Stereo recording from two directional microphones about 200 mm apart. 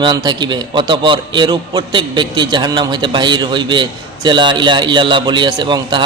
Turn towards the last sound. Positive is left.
turn(degrees=-20)  # may be behind; listen again after turning